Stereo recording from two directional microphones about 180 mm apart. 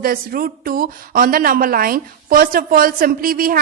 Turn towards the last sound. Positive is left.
turn(degrees=-55)  # may be behind; listen again after turning